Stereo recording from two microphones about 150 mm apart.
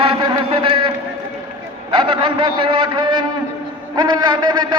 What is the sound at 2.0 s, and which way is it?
A man's voice, 35° right (ahead or behind).